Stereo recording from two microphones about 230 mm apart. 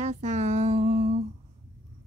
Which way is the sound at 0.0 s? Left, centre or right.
Right.